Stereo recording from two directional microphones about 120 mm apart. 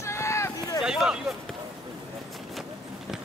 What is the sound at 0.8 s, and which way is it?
Speech, 5° right (ahead or behind).